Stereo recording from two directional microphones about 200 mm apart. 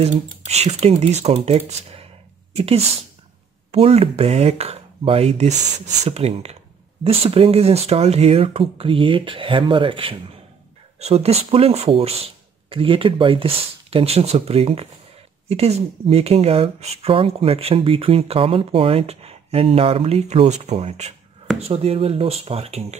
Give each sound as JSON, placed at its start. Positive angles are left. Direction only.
{"t": 0.0, "sound": "speech", "side_deg": -35}